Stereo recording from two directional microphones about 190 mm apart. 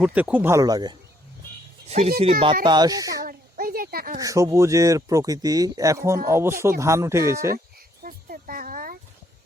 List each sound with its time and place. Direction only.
0.0 s speech: 5° right (ahead or behind)
1.9 s speech: 35° right (ahead or behind)
2.6 s speech: 20° right (ahead or behind)
3.2 s a sound: 50° right (ahead or behind)
4.2 s speech: 15° right (ahead or behind)
8.0 s a sound: 50° right (ahead or behind)